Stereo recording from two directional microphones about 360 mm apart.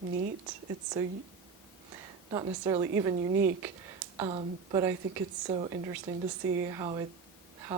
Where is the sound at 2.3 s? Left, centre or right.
Centre.